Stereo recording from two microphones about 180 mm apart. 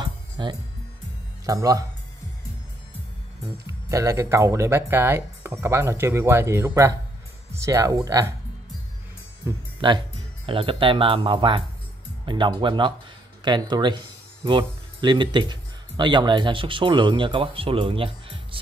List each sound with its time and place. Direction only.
0.0 s music: 25° right (ahead or behind)
1.4 s speech: 20° right (ahead or behind)
3.6 s speech: 15° right (ahead or behind)
9.4 s speech: 25° right (ahead or behind)